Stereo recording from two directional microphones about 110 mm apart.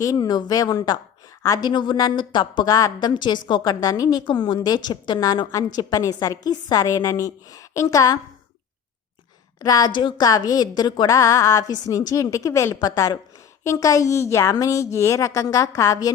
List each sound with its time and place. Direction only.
0.0 s a woman's voice: 35° left (ahead or behind)
2.7 s a woman's voice: 35° left (ahead or behind)
9.6 s a woman's voice: 35° left (ahead or behind)
10.2 s a woman's voice: 35° left (ahead or behind)